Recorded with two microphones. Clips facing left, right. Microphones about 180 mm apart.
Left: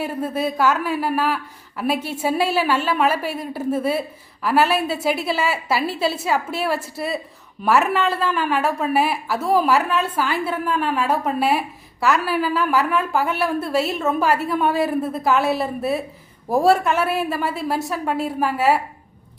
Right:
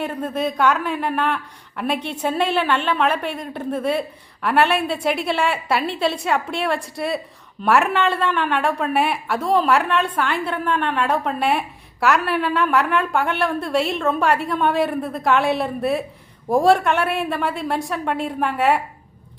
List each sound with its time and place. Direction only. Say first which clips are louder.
0.0 s a woman's voice: even; 5° left (ahead or behind)